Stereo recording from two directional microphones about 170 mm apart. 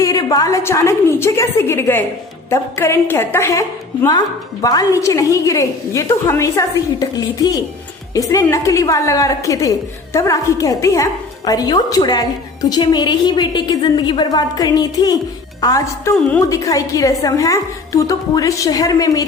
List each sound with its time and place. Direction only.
0.0 s a woman's voice: 20° left (ahead or behind)
4.6 s a woman's voice: 20° left (ahead or behind)